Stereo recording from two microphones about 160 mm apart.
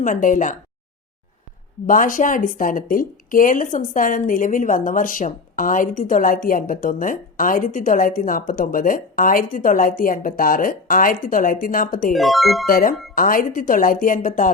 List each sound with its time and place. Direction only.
0.0 s a woman's voice: 55° left (ahead or behind)
1.9 s a woman's voice: 55° left (ahead or behind)
12.1 s speech: centre (ahead or behind)
12.6 s a woman's voice: 60° left (ahead or behind)